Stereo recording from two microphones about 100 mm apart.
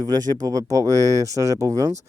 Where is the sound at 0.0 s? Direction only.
40° right (ahead or behind).